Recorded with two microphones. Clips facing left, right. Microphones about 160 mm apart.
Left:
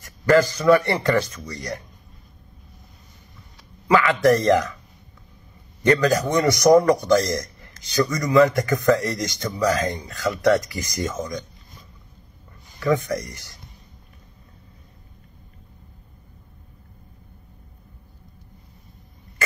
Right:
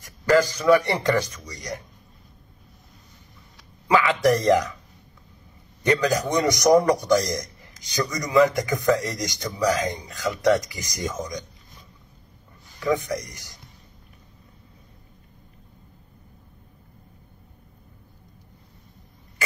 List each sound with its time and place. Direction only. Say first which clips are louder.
0.0 s speech: left 2 dB; 15° right (ahead or behind)
4.1 s speech: left 2 dB; 15° right (ahead or behind)
5.9 s speech: left 3 dB; 15° right (ahead or behind)
12.9 s speech: left 3 dB; 15° right (ahead or behind)